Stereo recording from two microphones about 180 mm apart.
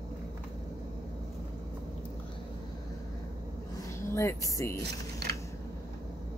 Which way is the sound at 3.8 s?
15° left (ahead or behind).